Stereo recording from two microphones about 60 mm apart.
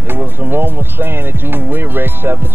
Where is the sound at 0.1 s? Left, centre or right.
Right.